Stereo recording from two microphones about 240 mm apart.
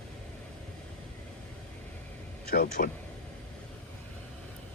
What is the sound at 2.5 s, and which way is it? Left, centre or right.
Speech, left.